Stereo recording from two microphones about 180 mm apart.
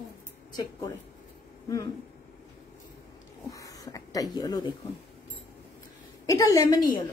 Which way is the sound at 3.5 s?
20° left (ahead or behind).